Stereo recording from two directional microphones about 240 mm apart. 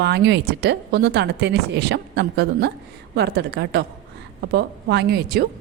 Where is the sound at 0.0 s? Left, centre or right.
Right.